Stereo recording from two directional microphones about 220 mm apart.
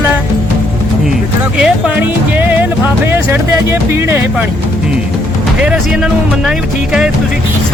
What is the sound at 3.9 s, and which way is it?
Speech, 10° right (ahead or behind).